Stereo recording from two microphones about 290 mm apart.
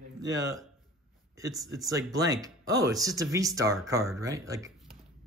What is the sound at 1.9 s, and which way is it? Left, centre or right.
Speech, centre.